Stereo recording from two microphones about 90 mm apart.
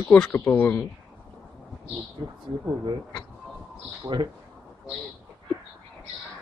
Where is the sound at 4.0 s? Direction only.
60° right (ahead or behind).